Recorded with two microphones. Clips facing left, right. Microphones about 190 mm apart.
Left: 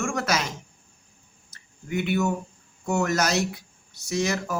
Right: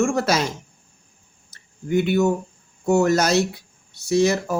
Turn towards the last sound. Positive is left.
turn(degrees=-30)  # may be behind; listen again after turning